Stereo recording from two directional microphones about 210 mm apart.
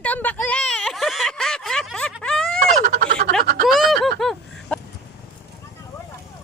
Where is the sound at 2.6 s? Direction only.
45° right (ahead or behind).